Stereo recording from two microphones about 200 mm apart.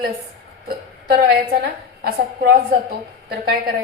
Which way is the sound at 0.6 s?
50° right (ahead or behind).